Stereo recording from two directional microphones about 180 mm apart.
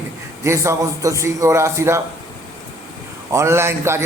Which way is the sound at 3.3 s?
15° right (ahead or behind).